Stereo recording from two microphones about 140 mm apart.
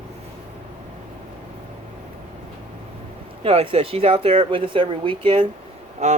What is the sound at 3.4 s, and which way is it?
Speech, 45° right (ahead or behind).